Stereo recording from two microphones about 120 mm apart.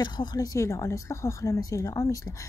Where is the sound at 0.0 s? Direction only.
35° left (ahead or behind).